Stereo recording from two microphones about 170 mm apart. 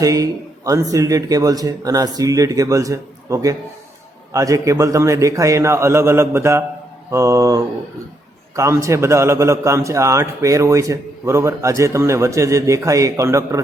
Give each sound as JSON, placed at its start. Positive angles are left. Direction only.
{"t": 0.0, "sound": "a man's voice", "side_deg": -20}